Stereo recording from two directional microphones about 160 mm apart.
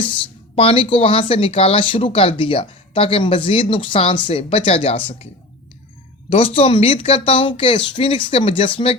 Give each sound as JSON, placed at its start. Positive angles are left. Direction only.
{"t": 0.0, "sound": "speech", "side_deg": 35}
{"t": 6.3, "sound": "speech", "side_deg": 35}